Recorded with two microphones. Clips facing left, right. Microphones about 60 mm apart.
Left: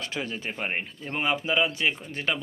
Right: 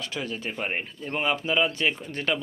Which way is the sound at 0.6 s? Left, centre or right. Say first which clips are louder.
Even; centre.